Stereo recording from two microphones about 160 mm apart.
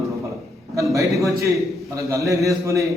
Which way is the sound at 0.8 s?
20° right (ahead or behind).